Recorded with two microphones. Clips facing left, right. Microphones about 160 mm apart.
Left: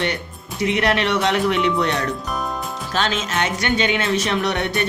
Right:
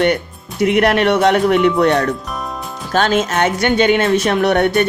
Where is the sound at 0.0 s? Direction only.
55° right (ahead or behind).